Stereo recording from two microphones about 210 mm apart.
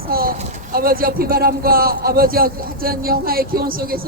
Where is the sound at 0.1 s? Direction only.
45° right (ahead or behind).